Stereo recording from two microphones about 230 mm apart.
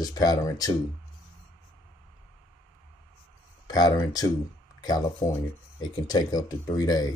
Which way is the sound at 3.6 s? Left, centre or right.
Centre.